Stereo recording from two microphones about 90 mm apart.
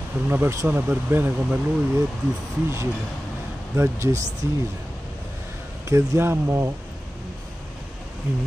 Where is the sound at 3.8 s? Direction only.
30° right (ahead or behind).